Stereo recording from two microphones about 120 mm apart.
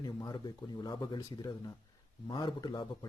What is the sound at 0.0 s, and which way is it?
A man's voice, 35° left (ahead or behind).